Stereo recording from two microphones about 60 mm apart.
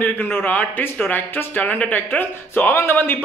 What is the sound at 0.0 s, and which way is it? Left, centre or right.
A man's voice, left.